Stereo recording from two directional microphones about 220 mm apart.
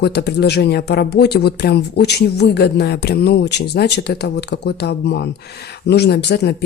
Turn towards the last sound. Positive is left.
turn(degrees=50)  # may be behind; listen again after turning